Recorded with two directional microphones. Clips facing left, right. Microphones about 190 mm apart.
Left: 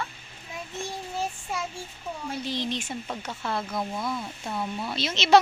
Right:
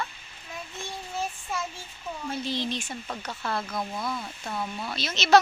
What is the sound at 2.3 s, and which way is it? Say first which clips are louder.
Speech: even; 15° left (ahead or behind).